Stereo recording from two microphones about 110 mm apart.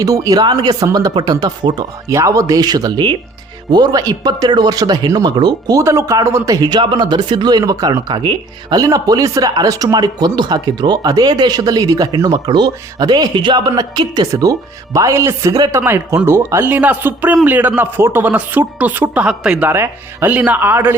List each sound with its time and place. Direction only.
0.0 s speech: 35° right (ahead or behind)
5.8 s speech: 25° right (ahead or behind)
15.8 s speech: 20° right (ahead or behind)
19.6 s speech: 20° right (ahead or behind)